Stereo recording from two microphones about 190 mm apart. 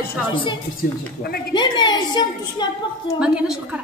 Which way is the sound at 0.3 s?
25° left (ahead or behind).